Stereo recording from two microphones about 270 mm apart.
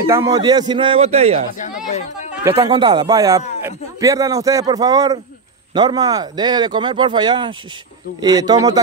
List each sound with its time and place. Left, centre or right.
0.0 s speech: centre
1.6 s speech: left
2.5 s speech: centre